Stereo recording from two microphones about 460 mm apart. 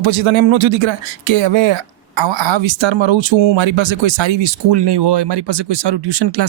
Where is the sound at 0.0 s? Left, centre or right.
Right.